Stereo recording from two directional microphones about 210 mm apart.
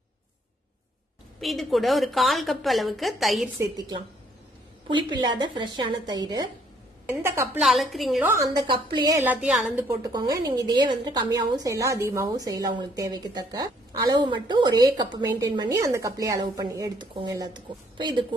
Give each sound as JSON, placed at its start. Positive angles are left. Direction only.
{"t": 1.4, "sound": "a woman's voice", "side_deg": 0}
{"t": 3.6, "sound": "a woman's voice", "side_deg": -20}
{"t": 7.6, "sound": "a woman's voice", "side_deg": 0}
{"t": 9.2, "sound": "a woman's voice", "side_deg": -5}
{"t": 10.0, "sound": "a woman's voice", "side_deg": -15}